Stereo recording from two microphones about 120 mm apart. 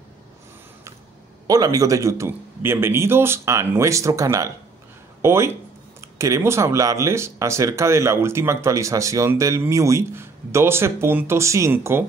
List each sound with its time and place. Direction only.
1.5 s speech: 30° right (ahead or behind)